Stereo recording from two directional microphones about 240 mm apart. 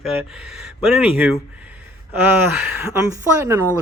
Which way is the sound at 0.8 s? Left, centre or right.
Centre.